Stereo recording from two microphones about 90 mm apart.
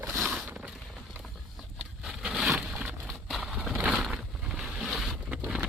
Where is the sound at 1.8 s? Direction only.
10° right (ahead or behind).